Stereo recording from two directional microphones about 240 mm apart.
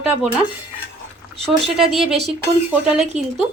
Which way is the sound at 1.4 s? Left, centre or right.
Right.